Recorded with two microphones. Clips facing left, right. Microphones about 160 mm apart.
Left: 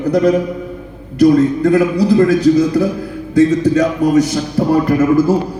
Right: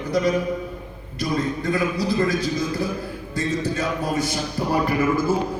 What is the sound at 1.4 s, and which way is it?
A man's voice, 75° left (ahead or behind).